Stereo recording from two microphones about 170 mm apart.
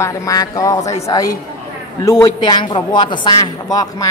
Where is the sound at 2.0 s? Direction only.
20° left (ahead or behind).